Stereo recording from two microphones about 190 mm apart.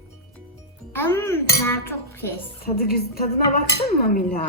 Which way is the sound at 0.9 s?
10° left (ahead or behind).